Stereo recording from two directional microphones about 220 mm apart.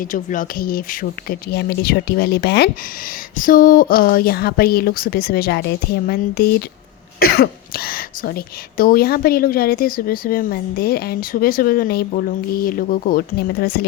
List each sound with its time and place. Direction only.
0.0 s speech: 35° left (ahead or behind)